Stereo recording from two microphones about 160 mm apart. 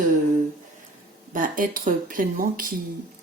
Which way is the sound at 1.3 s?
55° right (ahead or behind).